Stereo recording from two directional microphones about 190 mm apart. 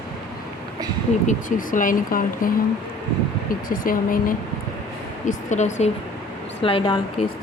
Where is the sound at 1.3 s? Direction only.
45° left (ahead or behind).